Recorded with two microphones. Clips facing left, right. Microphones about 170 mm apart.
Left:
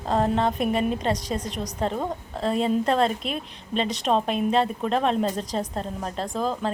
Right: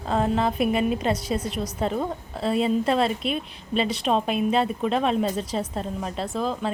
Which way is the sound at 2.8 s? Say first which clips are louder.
Even; 5° right (ahead or behind).